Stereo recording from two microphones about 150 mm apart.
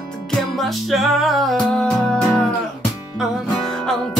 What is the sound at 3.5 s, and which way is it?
Music, centre (ahead or behind).